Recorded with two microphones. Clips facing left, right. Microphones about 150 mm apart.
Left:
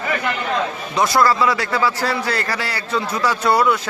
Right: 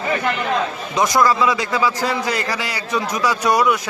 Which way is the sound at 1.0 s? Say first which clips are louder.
Even; 15° right (ahead or behind).